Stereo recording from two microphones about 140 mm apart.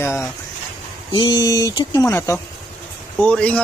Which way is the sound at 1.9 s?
20° left (ahead or behind).